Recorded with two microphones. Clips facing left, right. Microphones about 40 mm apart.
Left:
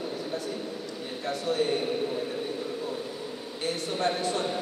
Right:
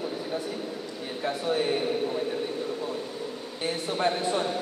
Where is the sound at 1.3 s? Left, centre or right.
Centre.